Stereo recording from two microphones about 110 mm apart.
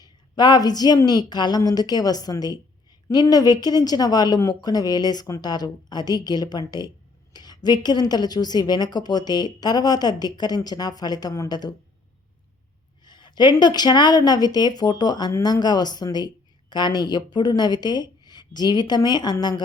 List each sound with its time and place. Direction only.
0.0 s a woman's voice: 40° left (ahead or behind)
13.1 s a woman's voice: 45° left (ahead or behind)